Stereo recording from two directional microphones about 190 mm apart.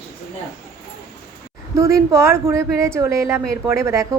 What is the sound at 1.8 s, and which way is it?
A woman's voice, 15° right (ahead or behind).